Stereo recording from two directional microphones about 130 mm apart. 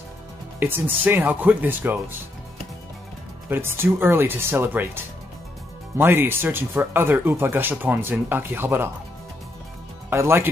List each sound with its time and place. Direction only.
0.6 s speech: 15° right (ahead or behind)
3.4 s speech: 15° right (ahead or behind)
10.0 s speech: 20° right (ahead or behind)